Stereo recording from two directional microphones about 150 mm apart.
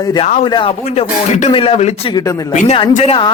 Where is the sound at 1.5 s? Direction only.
40° left (ahead or behind).